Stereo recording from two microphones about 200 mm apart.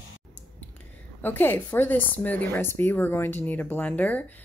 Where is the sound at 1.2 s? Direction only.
10° left (ahead or behind).